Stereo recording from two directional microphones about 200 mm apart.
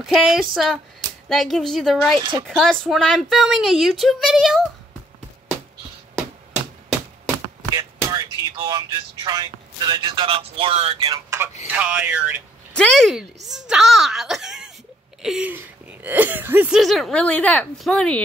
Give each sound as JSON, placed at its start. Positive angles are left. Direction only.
{"t": 0.0, "sound": "speech", "side_deg": 0}
{"t": 2.1, "sound": "speech", "side_deg": -25}
{"t": 2.4, "sound": "speech", "side_deg": 5}
{"t": 7.7, "sound": "speech", "side_deg": -20}
{"t": 11.1, "sound": "speech", "side_deg": -15}
{"t": 11.6, "sound": "music", "side_deg": -10}
{"t": 12.7, "sound": "speech", "side_deg": 5}